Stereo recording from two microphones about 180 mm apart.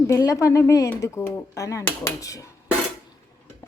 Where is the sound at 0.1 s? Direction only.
15° left (ahead or behind).